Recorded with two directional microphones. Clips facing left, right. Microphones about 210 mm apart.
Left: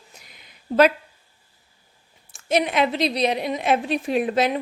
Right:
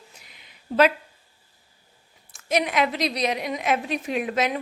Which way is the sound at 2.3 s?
30° left (ahead or behind).